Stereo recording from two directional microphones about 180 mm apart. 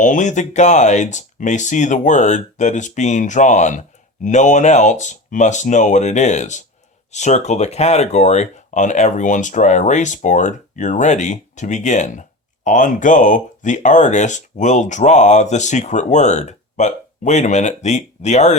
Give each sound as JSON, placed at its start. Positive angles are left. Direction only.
{"t": 0.0, "sound": "speech", "side_deg": 45}